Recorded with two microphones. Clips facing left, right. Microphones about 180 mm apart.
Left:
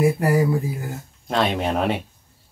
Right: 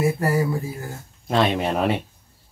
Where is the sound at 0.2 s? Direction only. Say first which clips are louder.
Left 3 dB; 15° left (ahead or behind).